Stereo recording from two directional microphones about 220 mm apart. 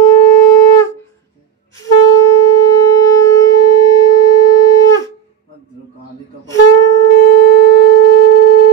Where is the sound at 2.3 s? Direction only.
15° left (ahead or behind).